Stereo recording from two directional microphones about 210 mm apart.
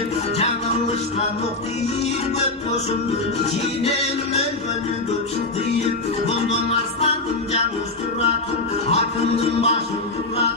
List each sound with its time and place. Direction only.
8.9 s music: 30° left (ahead or behind)